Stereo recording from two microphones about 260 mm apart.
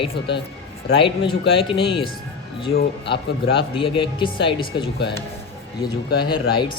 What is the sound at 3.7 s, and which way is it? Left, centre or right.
Speech, centre.